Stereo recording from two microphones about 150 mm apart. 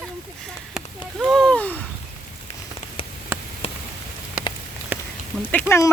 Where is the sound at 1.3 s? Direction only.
5° left (ahead or behind).